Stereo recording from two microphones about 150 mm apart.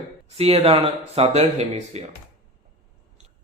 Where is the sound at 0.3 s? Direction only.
45° right (ahead or behind).